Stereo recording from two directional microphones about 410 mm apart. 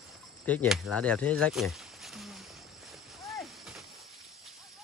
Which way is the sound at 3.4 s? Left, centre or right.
Centre.